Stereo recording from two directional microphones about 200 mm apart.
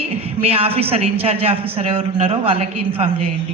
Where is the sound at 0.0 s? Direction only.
30° right (ahead or behind).